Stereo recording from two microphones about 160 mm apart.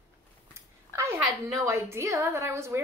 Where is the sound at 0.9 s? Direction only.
20° right (ahead or behind).